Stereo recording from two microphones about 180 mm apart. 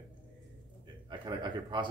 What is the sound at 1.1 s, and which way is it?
Speech, 25° right (ahead or behind).